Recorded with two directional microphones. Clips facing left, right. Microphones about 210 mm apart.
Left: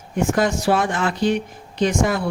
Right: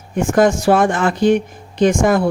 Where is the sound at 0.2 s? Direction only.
50° right (ahead or behind).